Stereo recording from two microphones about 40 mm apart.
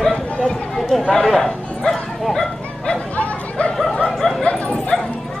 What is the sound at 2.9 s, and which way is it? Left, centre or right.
Bow-wow, left.